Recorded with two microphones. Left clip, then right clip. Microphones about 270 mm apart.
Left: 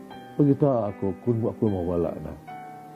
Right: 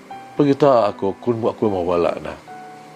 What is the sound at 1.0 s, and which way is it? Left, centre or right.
Speech, right.